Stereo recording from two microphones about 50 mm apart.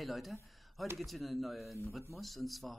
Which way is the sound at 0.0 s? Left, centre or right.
Centre.